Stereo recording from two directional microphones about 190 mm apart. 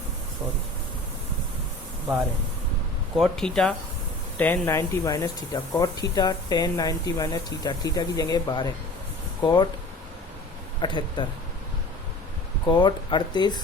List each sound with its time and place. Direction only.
3.2 s speech: 5° left (ahead or behind); by 9.6 s 20° left (ahead or behind)
10.8 s speech: 25° left (ahead or behind)
12.6 s speech: 25° left (ahead or behind)